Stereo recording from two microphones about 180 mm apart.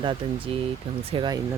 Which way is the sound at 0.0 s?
30° right (ahead or behind).